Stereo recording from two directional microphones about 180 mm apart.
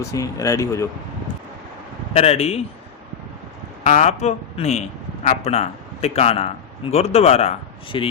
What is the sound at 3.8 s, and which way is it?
A man's voice, 40° left (ahead or behind).